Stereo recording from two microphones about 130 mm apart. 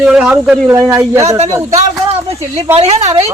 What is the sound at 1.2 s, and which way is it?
A woman's voice, 55° right (ahead or behind).